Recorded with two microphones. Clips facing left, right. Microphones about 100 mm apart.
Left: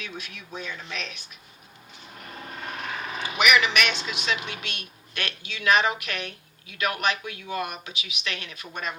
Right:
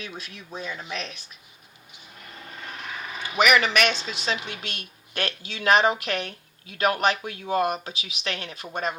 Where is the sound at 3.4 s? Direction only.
40° right (ahead or behind).